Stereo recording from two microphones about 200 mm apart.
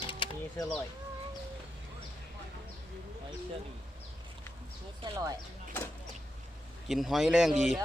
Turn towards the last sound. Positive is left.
turn(degrees=0)  # may be behind; listen again after turning